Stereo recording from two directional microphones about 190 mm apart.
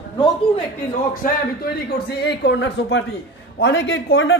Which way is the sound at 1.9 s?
60° left (ahead or behind).